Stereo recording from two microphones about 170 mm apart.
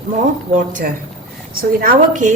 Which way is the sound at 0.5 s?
45° right (ahead or behind).